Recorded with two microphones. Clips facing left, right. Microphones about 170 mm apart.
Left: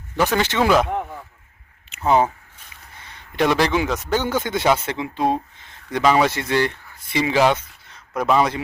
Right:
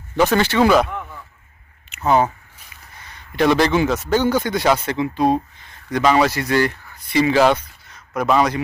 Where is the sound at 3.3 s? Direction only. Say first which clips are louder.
Right 3 dB; 10° left (ahead or behind).